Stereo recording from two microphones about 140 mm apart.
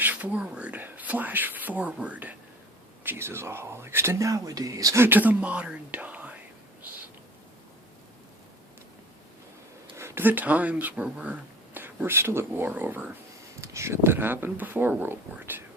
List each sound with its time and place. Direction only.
0.0 s speech: 10° right (ahead or behind)
10.0 s speech: 15° right (ahead or behind)